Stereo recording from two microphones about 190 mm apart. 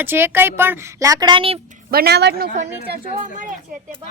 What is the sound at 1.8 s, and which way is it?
Speech, 55° right (ahead or behind).